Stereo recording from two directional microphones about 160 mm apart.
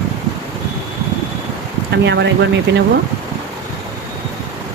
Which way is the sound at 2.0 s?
90° right.